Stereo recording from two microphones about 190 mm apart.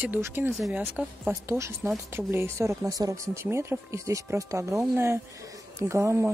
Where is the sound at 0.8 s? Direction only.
10° right (ahead or behind).